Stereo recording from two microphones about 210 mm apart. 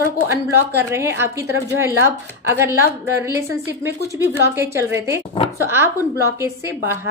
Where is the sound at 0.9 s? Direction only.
15° right (ahead or behind).